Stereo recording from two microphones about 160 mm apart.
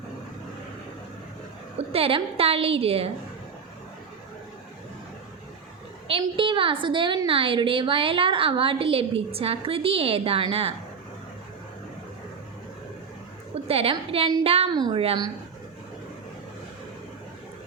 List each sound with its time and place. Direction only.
1.9 s a woman's voice: 35° right (ahead or behind)
6.1 s a woman's voice: 35° right (ahead or behind)
13.7 s a woman's voice: 35° right (ahead or behind)